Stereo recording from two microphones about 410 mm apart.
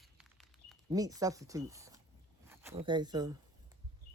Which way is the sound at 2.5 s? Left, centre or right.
Centre.